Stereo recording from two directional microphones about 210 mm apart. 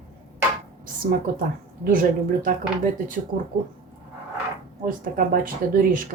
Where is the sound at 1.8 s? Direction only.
40° right (ahead or behind).